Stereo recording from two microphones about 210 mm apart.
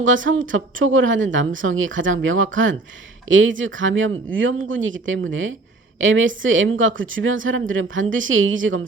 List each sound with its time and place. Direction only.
0.0 s a woman's voice: 65° right (ahead or behind)